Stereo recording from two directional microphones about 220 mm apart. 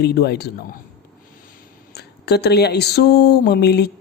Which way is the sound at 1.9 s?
50° left (ahead or behind).